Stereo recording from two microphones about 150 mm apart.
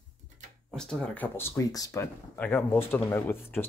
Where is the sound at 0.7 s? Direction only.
5° left (ahead or behind).